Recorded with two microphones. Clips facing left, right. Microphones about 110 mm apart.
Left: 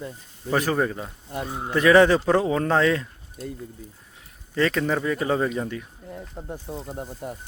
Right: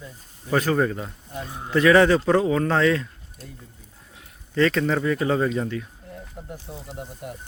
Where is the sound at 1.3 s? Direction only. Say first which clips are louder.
Left 5 dB; 55° left (ahead or behind).